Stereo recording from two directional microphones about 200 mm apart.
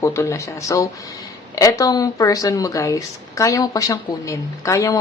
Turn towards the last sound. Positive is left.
turn(degrees=15)  # may be behind; listen again after turning